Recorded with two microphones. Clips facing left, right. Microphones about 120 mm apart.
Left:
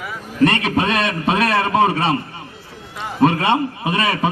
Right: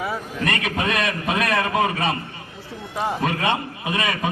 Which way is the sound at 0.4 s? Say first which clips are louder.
Left 8 dB; 30° left (ahead or behind).